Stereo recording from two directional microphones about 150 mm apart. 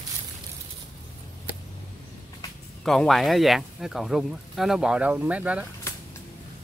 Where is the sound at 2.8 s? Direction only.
Centre (ahead or behind).